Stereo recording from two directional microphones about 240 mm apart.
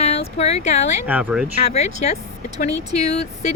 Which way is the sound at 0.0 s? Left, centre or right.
Left.